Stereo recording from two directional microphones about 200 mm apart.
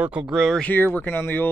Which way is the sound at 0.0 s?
5° right (ahead or behind).